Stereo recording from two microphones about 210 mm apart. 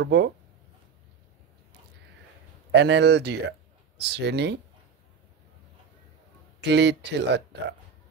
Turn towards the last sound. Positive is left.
turn(degrees=-55)  # may be behind; listen again after turning